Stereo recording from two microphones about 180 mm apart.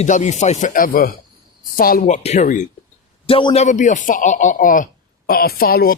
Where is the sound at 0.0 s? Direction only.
40° left (ahead or behind).